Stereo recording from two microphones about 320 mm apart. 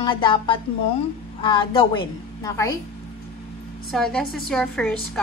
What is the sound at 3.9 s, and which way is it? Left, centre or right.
A woman's voice, centre.